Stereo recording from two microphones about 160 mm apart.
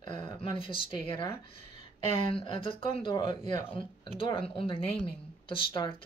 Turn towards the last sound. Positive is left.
turn(degrees=30)  # may be behind; listen again after turning